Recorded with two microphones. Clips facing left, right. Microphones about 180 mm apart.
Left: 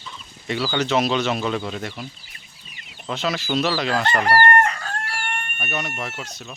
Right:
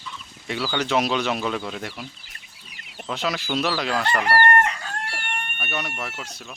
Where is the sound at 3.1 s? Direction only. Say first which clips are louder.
Left 2 dB; 10° right (ahead or behind).